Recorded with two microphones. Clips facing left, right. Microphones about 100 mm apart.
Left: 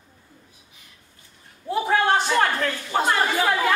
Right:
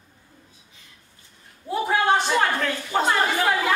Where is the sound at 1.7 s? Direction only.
Centre (ahead or behind).